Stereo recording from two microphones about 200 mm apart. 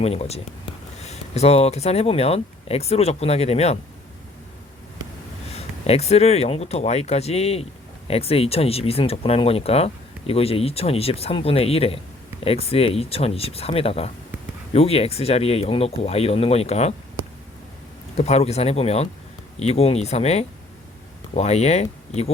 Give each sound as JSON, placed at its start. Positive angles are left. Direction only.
{"t": 0.0, "sound": "speech", "side_deg": 30}
{"t": 5.5, "sound": "speech", "side_deg": 30}
{"t": 18.2, "sound": "speech", "side_deg": 30}